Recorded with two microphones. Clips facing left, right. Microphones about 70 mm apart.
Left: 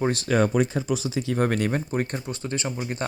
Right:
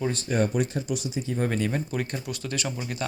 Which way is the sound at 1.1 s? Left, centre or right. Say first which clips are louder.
Left 3 dB; left.